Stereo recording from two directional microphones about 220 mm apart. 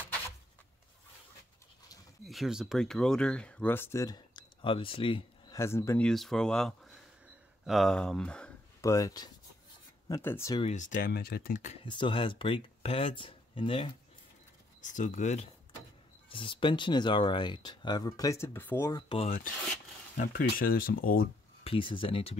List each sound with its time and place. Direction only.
2.2 s speech: centre (ahead or behind)
6.0 s speech: centre (ahead or behind)
8.9 s speech: 15° left (ahead or behind)
10.6 s speech: 35° left (ahead or behind)
14.8 s speech: 35° left (ahead or behind)
20.2 s speech: 40° left (ahead or behind)
21.6 s speech: 25° left (ahead or behind)